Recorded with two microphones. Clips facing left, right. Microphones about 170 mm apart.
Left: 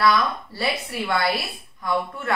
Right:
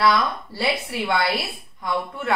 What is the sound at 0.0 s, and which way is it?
A woman's voice, 25° right (ahead or behind).